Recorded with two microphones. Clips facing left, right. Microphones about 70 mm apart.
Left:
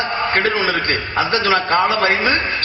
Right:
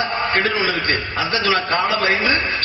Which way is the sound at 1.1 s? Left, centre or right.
Left.